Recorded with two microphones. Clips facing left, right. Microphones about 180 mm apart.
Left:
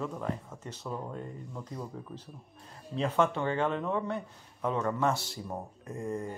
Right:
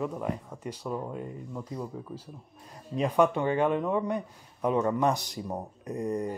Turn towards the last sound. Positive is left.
turn(degrees=-20)  # may be behind; listen again after turning